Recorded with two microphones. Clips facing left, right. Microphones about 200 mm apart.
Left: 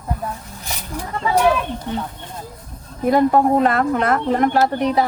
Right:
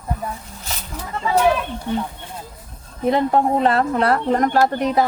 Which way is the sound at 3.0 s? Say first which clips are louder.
Left 3 dB; 25° right (ahead or behind).